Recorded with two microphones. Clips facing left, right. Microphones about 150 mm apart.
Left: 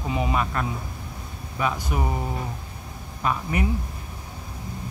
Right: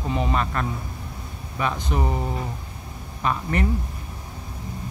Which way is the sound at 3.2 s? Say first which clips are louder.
Right 1 dB; 10° left (ahead or behind).